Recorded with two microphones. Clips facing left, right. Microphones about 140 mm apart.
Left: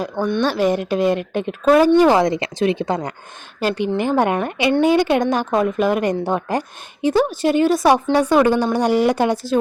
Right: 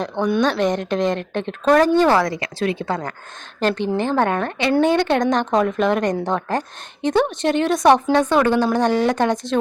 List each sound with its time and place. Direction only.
0.4 s a woman's voice: 5° left (ahead or behind)